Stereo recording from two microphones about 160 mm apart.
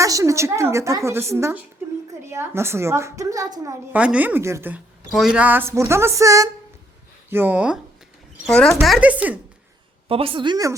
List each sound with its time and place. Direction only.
0.0 s a woman's voice: 20° right (ahead or behind)
3.9 s a woman's voice: 10° right (ahead or behind)
8.4 s a woman's voice: 5° left (ahead or behind)
10.1 s a woman's voice: 35° right (ahead or behind)